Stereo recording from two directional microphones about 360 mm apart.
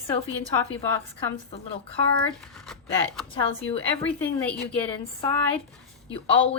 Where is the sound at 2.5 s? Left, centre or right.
Centre.